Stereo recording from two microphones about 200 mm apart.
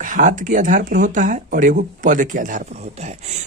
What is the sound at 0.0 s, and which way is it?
Speech, 40° right (ahead or behind).